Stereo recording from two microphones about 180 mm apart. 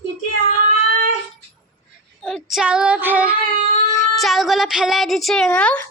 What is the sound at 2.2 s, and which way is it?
Child singing, centre (ahead or behind).